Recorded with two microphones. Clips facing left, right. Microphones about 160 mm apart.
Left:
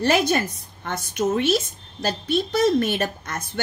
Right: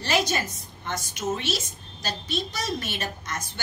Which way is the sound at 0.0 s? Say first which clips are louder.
Left 6 dB; 55° left (ahead or behind).